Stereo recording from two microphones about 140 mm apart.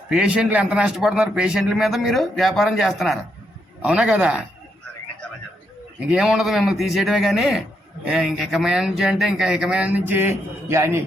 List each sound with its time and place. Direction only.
0.1 s a man's voice: 10° right (ahead or behind)
6.1 s a man's voice: 5° right (ahead or behind); by 11.0 s 20° right (ahead or behind)